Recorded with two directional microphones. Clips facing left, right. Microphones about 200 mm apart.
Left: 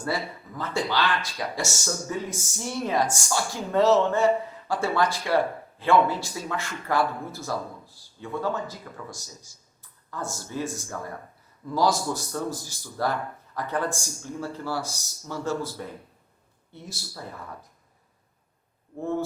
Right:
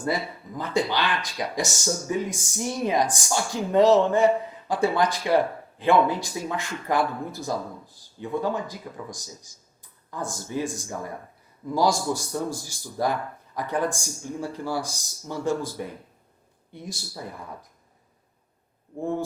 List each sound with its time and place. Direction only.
0.0 s a man's voice: 15° right (ahead or behind)